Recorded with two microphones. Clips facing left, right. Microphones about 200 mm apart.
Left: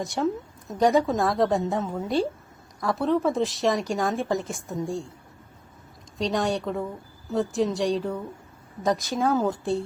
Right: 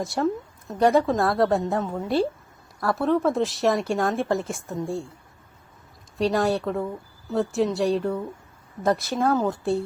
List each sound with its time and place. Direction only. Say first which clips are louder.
0.0 s a woman's voice: right 1 dB; centre (ahead or behind)
6.1 s a woman's voice: right 3 dB; centre (ahead or behind)